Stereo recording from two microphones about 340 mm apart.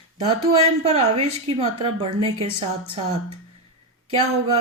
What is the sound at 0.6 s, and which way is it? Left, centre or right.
A woman's voice, centre.